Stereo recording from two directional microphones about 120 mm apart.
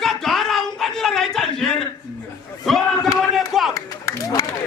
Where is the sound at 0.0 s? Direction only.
Centre (ahead or behind).